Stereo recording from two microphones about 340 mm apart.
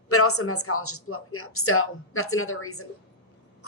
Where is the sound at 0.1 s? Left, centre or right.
Left.